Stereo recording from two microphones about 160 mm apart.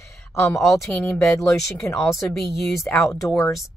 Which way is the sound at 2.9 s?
20° left (ahead or behind).